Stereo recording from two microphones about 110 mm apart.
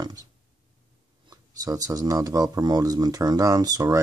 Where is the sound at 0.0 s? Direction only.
35° right (ahead or behind).